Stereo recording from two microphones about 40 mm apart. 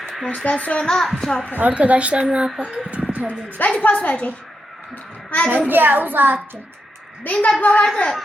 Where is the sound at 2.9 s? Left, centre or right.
Right.